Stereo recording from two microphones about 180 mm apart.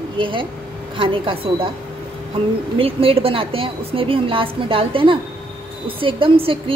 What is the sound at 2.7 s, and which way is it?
A woman's voice, 30° right (ahead or behind).